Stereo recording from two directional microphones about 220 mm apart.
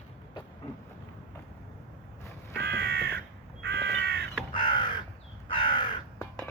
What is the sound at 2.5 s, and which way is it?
Crow, 50° right (ahead or behind).